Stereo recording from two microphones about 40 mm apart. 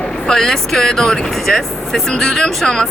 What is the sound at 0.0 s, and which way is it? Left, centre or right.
Speech, centre.